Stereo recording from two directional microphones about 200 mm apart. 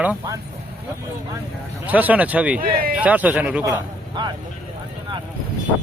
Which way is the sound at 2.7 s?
45° right (ahead or behind).